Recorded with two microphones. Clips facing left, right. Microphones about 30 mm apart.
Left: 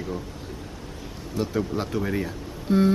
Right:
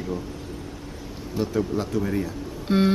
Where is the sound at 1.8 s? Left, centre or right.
Centre.